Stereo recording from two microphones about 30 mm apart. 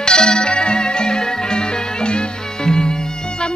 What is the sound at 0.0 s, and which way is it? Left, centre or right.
Music, left.